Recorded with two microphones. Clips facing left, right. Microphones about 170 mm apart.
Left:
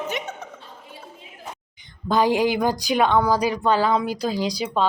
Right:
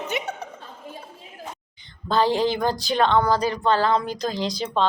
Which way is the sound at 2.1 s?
15° left (ahead or behind).